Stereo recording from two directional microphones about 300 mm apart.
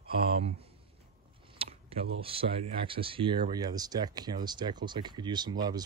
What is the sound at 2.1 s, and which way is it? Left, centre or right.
Speech, centre.